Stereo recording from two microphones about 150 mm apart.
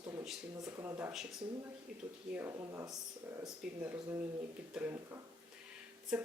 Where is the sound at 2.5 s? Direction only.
20° right (ahead or behind).